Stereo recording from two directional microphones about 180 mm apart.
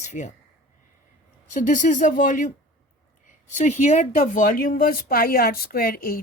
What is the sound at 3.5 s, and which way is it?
Speech, 40° left (ahead or behind).